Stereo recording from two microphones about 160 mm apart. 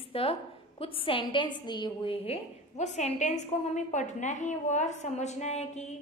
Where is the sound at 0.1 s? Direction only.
35° left (ahead or behind).